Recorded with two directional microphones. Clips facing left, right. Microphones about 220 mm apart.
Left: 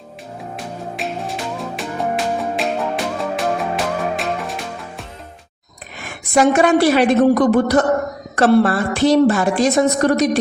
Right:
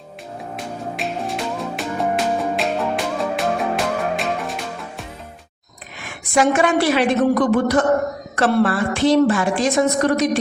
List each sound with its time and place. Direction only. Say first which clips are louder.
0.5 s music: right 1 dB; centre (ahead or behind)
6.3 s a woman's voice: left 3 dB; 40° left (ahead or behind)